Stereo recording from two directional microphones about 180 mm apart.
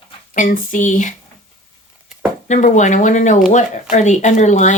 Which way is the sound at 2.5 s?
45° left (ahead or behind).